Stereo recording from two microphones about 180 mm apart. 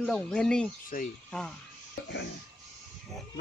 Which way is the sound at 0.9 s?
50° left (ahead or behind).